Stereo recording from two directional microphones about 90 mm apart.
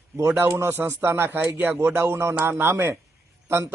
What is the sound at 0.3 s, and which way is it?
A man's voice, 25° right (ahead or behind).